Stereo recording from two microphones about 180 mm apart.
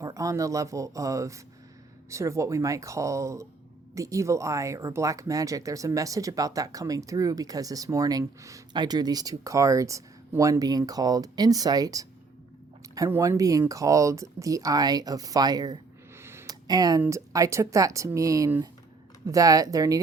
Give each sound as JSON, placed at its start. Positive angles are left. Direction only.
{"t": 0.0, "sound": "speech", "side_deg": -20}